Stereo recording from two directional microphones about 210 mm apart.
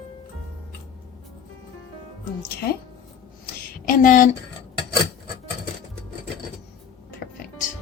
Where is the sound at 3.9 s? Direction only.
40° left (ahead or behind).